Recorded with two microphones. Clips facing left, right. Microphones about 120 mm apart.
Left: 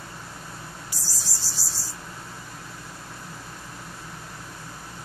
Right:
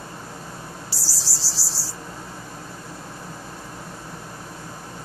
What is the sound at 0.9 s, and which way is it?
Cricket, 30° right (ahead or behind).